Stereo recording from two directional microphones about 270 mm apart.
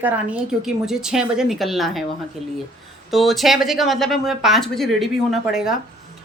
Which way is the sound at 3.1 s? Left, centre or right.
Centre.